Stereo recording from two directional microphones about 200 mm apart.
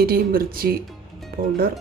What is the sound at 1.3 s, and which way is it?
Music, 50° right (ahead or behind).